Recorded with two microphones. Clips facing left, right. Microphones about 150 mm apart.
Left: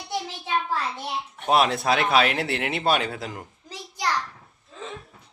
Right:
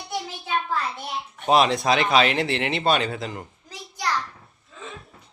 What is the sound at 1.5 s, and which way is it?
Speech, 5° left (ahead or behind).